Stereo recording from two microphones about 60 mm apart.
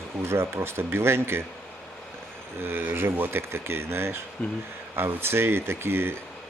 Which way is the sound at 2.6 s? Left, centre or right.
Right.